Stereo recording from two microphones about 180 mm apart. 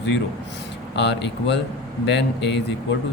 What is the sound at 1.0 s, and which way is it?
Speech, 75° left (ahead or behind).